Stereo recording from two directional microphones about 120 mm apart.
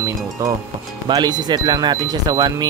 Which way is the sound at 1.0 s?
35° right (ahead or behind).